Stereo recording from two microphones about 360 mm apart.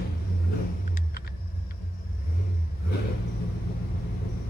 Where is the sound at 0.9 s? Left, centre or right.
Left.